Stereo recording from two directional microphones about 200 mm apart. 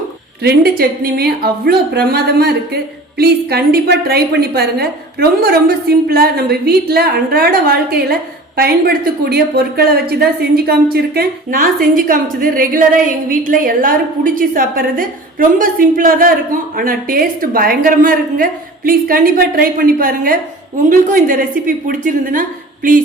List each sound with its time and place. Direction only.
0.4 s a woman's voice: 50° right (ahead or behind)